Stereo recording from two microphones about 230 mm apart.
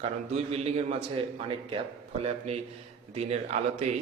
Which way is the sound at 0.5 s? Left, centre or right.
Right.